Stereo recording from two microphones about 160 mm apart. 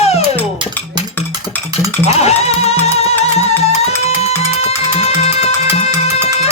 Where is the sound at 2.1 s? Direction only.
40° left (ahead or behind).